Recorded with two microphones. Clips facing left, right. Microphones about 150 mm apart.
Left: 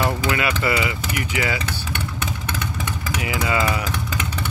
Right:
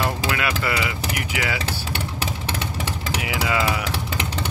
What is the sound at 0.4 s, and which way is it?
Speech, centre (ahead or behind).